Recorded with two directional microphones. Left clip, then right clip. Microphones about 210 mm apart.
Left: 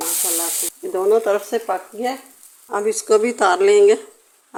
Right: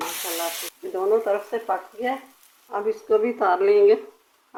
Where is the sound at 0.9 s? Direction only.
50° left (ahead or behind); by 4.0 s 35° left (ahead or behind).